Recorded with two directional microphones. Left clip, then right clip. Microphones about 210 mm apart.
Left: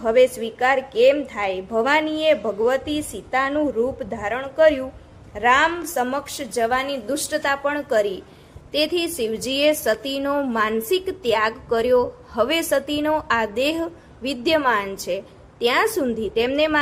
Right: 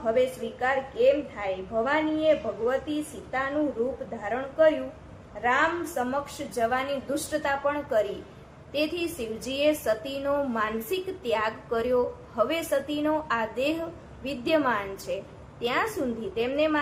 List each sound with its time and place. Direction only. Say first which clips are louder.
0.0 s a woman's voice: left 8 dB; 60° left (ahead or behind)